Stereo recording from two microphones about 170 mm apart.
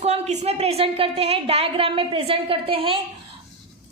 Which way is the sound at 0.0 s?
40° right (ahead or behind).